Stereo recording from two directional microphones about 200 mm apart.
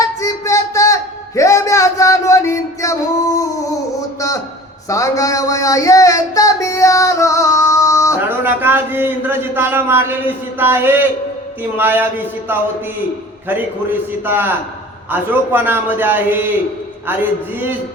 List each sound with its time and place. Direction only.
0.0 s music: 15° left (ahead or behind)
4.9 s a sound: 15° left (ahead or behind)
8.3 s a man's voice: 10° right (ahead or behind)